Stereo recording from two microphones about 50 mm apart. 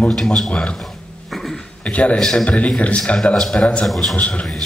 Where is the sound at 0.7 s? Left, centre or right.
Centre.